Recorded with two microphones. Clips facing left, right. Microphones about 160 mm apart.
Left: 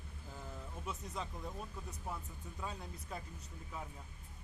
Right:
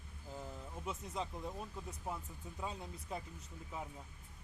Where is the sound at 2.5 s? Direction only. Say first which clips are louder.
Right 1 dB; 20° right (ahead or behind).